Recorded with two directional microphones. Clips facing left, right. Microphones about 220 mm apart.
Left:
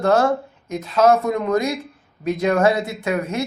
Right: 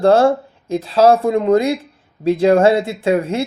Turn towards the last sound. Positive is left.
turn(degrees=-30)  # may be behind; listen again after turning